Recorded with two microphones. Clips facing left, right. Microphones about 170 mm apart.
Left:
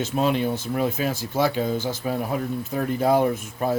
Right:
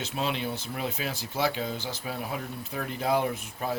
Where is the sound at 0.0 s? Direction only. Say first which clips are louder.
Left 8 dB; 45° left (ahead or behind).